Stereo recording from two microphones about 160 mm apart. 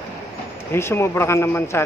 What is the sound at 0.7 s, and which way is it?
Speech, 15° left (ahead or behind).